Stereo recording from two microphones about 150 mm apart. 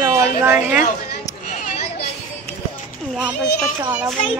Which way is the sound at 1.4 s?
50° left (ahead or behind).